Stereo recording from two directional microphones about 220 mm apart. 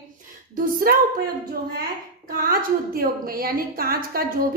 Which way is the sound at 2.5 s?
40° right (ahead or behind).